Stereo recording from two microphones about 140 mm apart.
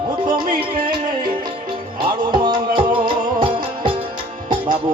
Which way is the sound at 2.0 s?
30° right (ahead or behind).